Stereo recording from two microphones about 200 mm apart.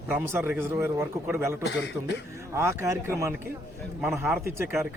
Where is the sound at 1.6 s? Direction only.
60° left (ahead or behind).